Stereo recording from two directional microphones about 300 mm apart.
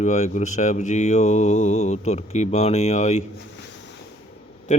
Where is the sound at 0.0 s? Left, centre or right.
Left.